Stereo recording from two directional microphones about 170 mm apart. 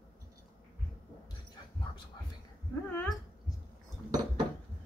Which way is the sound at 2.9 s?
10° left (ahead or behind).